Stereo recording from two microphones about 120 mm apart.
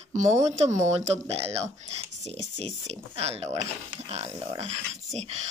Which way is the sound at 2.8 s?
60° right (ahead or behind).